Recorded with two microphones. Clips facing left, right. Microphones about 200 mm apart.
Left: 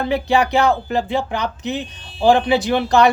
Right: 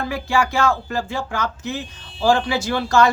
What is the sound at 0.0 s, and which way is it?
Speech, 20° left (ahead or behind).